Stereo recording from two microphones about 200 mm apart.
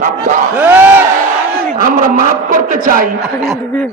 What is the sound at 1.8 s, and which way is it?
A man's voice, 45° right (ahead or behind).